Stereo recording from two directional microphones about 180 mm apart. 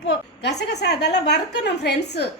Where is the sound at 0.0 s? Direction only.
80° left.